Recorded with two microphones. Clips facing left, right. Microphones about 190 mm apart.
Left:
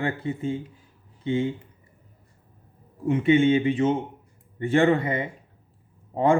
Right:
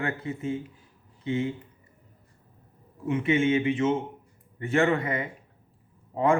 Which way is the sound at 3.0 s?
35° left (ahead or behind).